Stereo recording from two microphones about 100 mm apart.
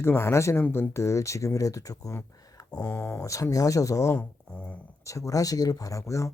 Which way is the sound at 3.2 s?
35° left (ahead or behind).